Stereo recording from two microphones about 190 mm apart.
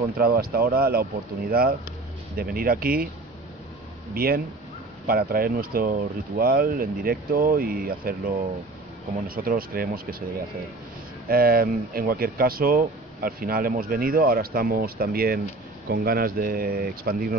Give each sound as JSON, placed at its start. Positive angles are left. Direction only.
{"t": 0.2, "sound": "speech", "side_deg": -55}
{"t": 4.1, "sound": "speech", "side_deg": -50}
{"t": 9.3, "sound": "speech", "side_deg": -50}
{"t": 11.2, "sound": "speech", "side_deg": -50}